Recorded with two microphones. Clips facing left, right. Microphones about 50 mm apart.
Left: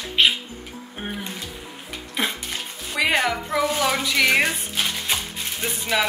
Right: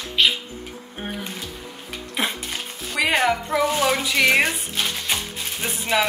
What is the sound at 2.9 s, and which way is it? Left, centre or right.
Music, centre.